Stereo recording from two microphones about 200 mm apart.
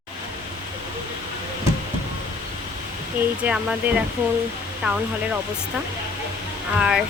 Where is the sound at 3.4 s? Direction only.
5° right (ahead or behind).